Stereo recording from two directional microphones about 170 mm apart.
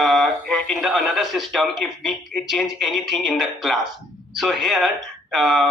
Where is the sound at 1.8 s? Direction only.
Centre (ahead or behind).